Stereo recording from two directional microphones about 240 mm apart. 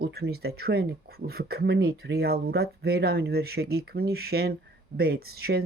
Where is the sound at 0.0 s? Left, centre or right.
Right.